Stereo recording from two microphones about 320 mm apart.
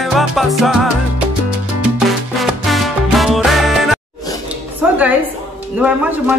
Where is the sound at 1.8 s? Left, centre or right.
Centre.